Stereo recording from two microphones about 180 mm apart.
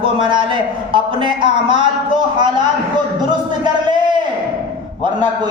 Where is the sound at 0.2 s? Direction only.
25° right (ahead or behind).